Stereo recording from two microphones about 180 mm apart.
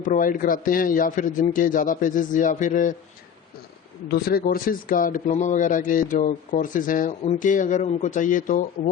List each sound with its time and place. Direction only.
0.0 s a man's voice: 45° left (ahead or behind)
4.1 s a man's voice: 55° left (ahead or behind)